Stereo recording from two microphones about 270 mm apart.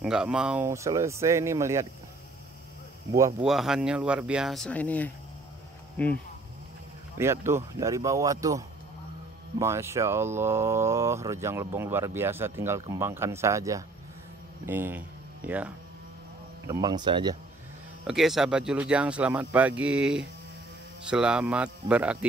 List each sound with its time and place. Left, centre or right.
0.0 s speech: centre
3.2 s speech: centre
3.4 s speech: centre
7.2 s speech: centre
18.0 s speech: centre